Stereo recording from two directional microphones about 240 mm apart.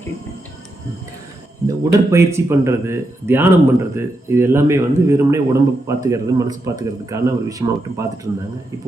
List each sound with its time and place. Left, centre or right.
1.6 s speech: centre